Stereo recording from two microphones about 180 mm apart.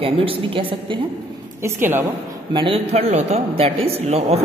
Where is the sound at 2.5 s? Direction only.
25° right (ahead or behind).